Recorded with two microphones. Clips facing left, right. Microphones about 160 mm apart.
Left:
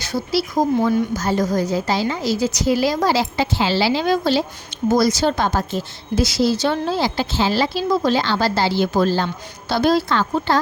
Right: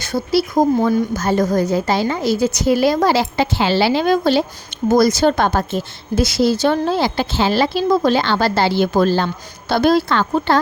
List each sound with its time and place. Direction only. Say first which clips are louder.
0.0 s a woman's voice: right 4 dB; 55° right (ahead or behind)